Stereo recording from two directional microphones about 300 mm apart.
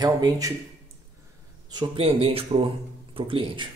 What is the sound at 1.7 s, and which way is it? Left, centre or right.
A man's voice, centre.